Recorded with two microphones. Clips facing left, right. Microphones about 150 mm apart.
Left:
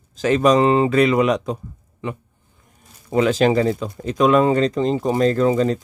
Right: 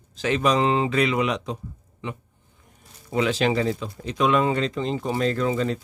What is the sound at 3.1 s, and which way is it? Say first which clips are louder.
Speech: left 6 dB; 45° left (ahead or behind).